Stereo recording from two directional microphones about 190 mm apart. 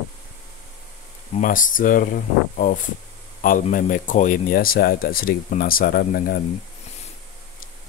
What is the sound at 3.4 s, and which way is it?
Speech, 45° left (ahead or behind).